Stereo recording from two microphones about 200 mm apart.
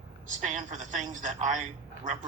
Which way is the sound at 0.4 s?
40° right (ahead or behind).